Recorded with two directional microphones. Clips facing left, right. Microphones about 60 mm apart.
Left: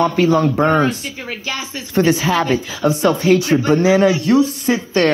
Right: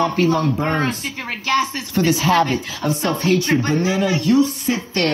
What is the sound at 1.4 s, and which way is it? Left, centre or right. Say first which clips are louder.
Speech: right 10 dB; right.